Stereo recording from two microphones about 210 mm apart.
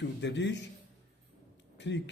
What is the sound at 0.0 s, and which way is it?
Speech, 55° left (ahead or behind).